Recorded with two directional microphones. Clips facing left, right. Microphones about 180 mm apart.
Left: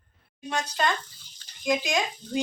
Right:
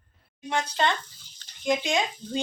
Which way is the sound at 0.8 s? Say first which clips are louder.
Left 1 dB; 20° right (ahead or behind).